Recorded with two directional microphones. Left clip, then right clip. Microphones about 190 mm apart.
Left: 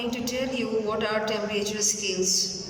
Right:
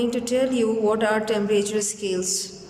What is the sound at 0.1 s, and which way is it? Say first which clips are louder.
A woman's voice: right 7 dB; 40° right (ahead or behind).